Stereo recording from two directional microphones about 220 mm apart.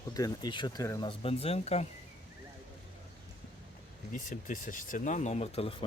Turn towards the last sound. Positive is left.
turn(degrees=25)  # may be behind; listen again after turning